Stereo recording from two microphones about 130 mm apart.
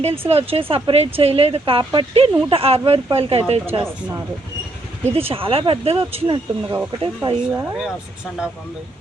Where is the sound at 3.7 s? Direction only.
15° right (ahead or behind).